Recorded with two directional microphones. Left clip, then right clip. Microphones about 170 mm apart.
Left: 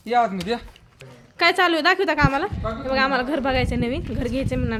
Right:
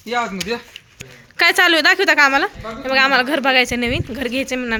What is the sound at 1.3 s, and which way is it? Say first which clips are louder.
A woman's voice: right 5 dB; 5° right (ahead or behind).